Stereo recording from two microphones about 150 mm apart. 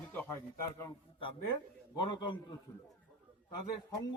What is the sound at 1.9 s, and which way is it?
Speech, 30° left (ahead or behind).